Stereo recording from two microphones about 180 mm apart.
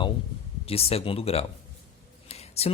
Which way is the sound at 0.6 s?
35° left (ahead or behind).